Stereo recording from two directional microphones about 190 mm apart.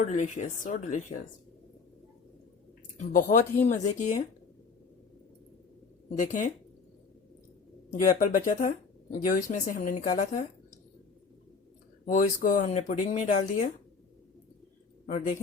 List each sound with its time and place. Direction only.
0.0 s speech: 40° left (ahead or behind)
3.1 s speech: 45° left (ahead or behind)
6.1 s speech: 45° left (ahead or behind)
7.9 s speech: 45° left (ahead or behind)
12.0 s speech: 40° left (ahead or behind)
15.0 s a man's voice: 45° left (ahead or behind)